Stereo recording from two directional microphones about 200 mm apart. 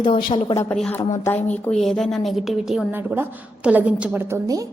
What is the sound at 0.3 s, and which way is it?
A woman's voice, 20° left (ahead or behind).